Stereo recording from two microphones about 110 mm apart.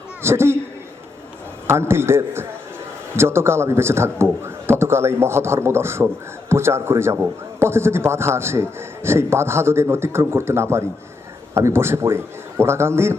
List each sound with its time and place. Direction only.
0.2 s speech: 25° right (ahead or behind)
1.6 s speech: 25° right (ahead or behind)